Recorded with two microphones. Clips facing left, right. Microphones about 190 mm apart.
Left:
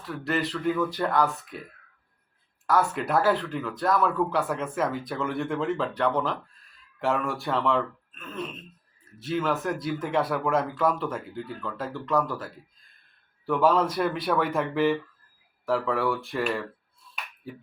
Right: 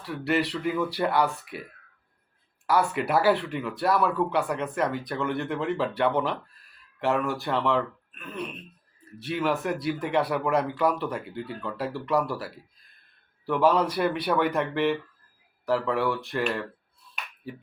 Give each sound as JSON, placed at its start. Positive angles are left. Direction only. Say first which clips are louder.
{"t": 0.1, "sound": "speech", "louder": "right 2 dB", "side_deg": -5}
{"t": 3.0, "sound": "speech", "louder": "right 1 dB", "side_deg": -5}
{"t": 13.4, "sound": "speech", "louder": "even", "side_deg": 0}